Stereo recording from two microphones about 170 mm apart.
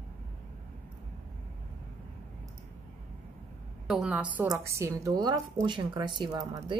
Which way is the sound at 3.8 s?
5° right (ahead or behind).